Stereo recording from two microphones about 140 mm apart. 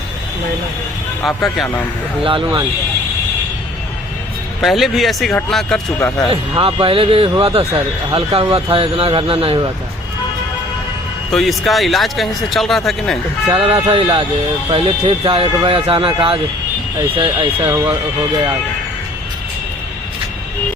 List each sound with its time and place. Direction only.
2.2 s speech: 35° right (ahead or behind)
4.6 s speech: centre (ahead or behind)
6.0 s speech: 15° left (ahead or behind)
6.3 s speech: 35° right (ahead or behind)
11.3 s speech: centre (ahead or behind)
13.5 s speech: 40° right (ahead or behind)
17.6 s speech: 25° right (ahead or behind)